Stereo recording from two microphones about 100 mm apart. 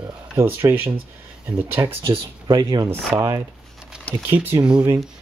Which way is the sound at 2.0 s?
50° right (ahead or behind).